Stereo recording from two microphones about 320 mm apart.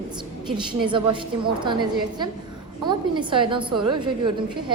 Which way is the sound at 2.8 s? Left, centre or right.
Centre.